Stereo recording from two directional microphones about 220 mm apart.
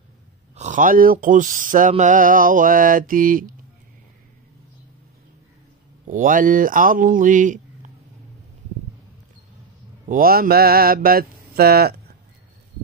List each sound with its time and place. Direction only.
0.6 s mantra: 35° right (ahead or behind)
6.0 s mantra: 35° right (ahead or behind)
10.0 s mantra: 40° right (ahead or behind)